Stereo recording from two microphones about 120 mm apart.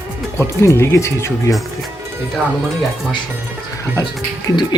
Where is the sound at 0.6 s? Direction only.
20° left (ahead or behind).